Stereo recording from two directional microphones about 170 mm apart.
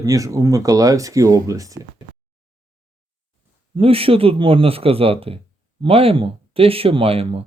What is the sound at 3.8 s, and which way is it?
Speech, 35° right (ahead or behind).